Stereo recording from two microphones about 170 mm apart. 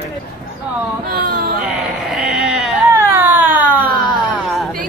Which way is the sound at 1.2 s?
55° right (ahead or behind).